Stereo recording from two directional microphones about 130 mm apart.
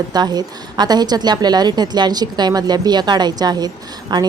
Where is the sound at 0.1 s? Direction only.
30° right (ahead or behind).